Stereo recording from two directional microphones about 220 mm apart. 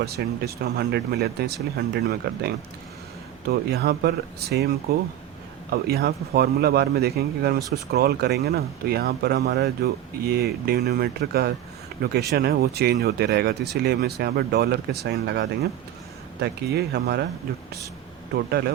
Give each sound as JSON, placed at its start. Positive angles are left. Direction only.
{"t": 0.0, "sound": "speech", "side_deg": -45}